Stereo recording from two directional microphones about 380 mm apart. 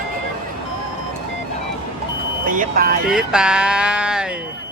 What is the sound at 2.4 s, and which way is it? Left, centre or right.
Speech, right.